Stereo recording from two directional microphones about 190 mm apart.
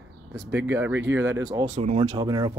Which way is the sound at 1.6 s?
35° right (ahead or behind).